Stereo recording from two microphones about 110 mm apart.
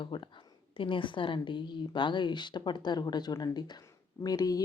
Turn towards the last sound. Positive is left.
turn(degrees=35)  # may be behind; listen again after turning